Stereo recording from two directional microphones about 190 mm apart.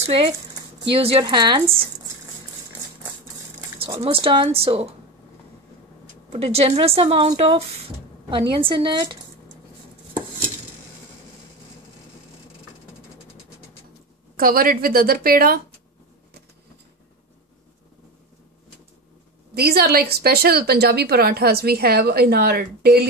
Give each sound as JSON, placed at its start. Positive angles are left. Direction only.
{"t": 0.0, "sound": "a woman's voice", "side_deg": -30}
{"t": 3.8, "sound": "a woman's voice", "side_deg": -30}
{"t": 6.3, "sound": "a woman's voice", "side_deg": -30}
{"t": 14.3, "sound": "a woman's voice", "side_deg": -50}
{"t": 19.5, "sound": "a woman's voice", "side_deg": -55}